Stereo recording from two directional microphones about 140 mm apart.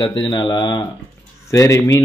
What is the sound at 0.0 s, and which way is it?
A man's voice, 35° left (ahead or behind).